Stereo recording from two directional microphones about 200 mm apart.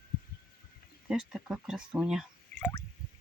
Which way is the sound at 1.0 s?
Centre (ahead or behind).